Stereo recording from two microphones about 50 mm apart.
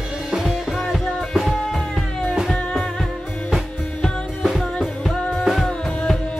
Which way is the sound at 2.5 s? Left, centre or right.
Centre.